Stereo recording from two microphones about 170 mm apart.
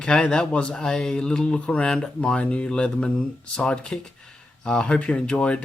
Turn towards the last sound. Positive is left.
turn(degrees=5)  # may be behind; listen again after turning